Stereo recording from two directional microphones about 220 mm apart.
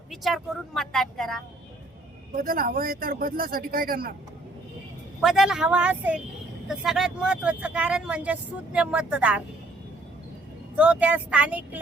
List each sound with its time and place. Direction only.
0.1 s speech: centre (ahead or behind)
2.3 s speech: 40° right (ahead or behind)
5.2 s speech: centre (ahead or behind)
10.8 s speech: 5° right (ahead or behind)